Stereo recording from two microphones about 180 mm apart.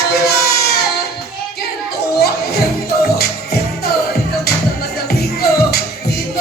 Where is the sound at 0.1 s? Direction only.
60° left (ahead or behind).